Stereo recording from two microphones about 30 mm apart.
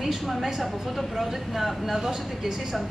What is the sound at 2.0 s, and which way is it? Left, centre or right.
Speech, centre.